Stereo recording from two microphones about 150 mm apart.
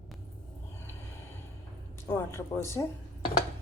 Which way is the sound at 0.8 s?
15° left (ahead or behind).